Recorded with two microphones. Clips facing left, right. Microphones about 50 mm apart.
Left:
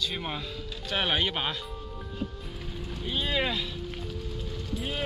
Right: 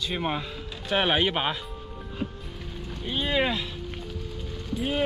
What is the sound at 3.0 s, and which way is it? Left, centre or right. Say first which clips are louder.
Speech: right 3 dB; centre.